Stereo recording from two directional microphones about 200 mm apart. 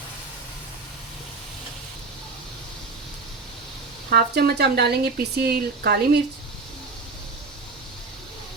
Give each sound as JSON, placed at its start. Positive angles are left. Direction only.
{"t": 4.1, "sound": "speech", "side_deg": -55}